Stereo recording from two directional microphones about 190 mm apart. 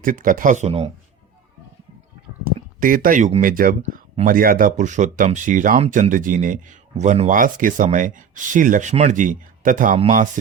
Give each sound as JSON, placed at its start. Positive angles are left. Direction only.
{"t": 0.0, "sound": "speech", "side_deg": -45}
{"t": 2.6, "sound": "speech", "side_deg": -45}